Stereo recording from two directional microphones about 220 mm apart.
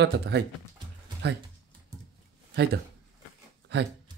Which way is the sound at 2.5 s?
50° right (ahead or behind).